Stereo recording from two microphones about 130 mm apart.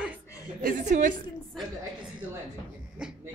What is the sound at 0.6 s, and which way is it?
Speech, 85° right.